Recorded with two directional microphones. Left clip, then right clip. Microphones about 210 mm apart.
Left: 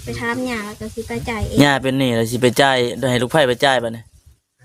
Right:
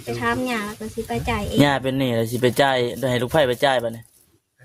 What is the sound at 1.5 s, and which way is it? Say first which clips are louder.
Speech: left 5 dB; 25° left (ahead or behind).